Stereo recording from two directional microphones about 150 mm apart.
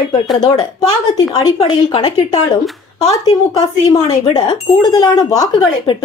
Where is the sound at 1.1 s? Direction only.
25° left (ahead or behind).